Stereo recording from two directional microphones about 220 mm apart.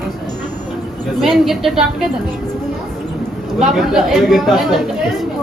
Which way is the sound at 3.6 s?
Centre (ahead or behind).